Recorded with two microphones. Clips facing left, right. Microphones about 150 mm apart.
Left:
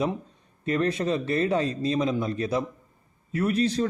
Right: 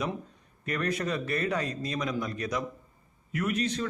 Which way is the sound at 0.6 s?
25° left (ahead or behind).